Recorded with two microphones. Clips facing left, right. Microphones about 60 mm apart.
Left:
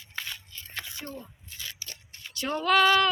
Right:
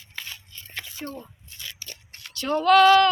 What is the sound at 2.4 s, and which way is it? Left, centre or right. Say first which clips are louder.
Female singing: right 6 dB; centre.